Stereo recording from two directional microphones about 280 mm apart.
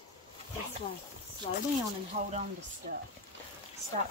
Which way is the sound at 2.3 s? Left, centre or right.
Right.